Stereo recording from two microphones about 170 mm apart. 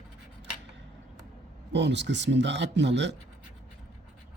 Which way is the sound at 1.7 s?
90° right.